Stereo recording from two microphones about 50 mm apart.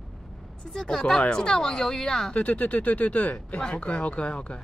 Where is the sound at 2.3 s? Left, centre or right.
Left.